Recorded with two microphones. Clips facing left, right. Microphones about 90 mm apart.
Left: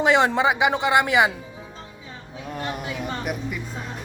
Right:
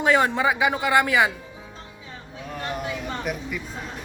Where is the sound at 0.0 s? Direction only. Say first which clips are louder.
Left 1 dB; 20° left (ahead or behind).